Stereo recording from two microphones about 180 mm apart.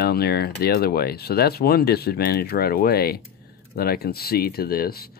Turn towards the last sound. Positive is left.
turn(degrees=55)  # may be behind; listen again after turning